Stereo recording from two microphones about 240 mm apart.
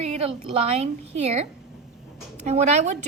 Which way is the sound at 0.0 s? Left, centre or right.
Right.